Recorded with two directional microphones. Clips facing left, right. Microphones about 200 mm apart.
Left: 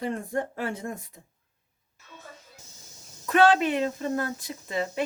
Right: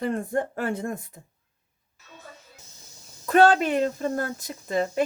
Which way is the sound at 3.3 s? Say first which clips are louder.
Right 2 dB; 40° right (ahead or behind).